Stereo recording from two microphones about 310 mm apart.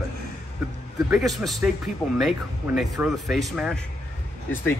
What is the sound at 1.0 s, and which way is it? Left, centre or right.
Speech, centre.